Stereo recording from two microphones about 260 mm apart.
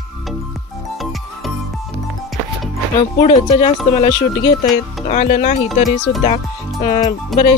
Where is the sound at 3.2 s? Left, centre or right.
Left.